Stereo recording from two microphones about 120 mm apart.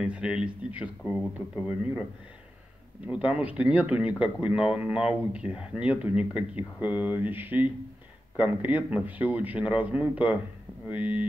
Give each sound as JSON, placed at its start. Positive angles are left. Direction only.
{"t": 0.0, "sound": "speech", "side_deg": -10}
{"t": 3.1, "sound": "speech", "side_deg": -10}